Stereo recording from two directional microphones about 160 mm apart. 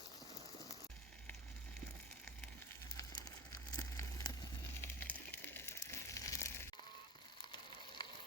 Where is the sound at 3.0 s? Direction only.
20° left (ahead or behind).